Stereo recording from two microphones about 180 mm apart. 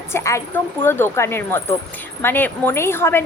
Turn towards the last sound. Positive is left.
turn(degrees=15)  # may be behind; listen again after turning